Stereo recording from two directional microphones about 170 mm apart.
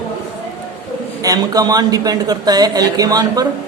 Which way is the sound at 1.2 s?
20° right (ahead or behind).